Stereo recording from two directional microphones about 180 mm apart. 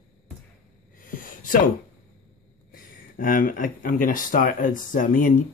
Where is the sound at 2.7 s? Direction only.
50° left (ahead or behind).